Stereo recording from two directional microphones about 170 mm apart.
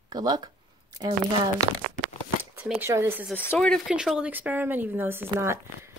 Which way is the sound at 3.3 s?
10° left (ahead or behind).